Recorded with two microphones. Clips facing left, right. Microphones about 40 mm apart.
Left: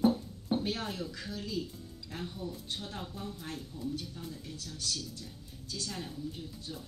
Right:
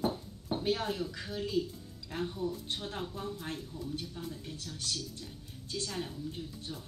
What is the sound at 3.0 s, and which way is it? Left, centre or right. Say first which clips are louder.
Speech: right 3 dB; centre.